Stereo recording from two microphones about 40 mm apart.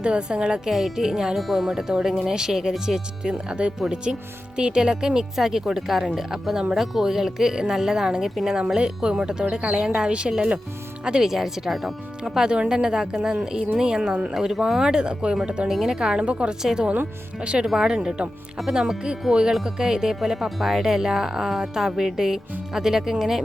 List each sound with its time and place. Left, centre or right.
0.0 s speech: right
0.7 s speech: centre
11.3 s speech: centre
15.6 s speech: centre
15.9 s speech: centre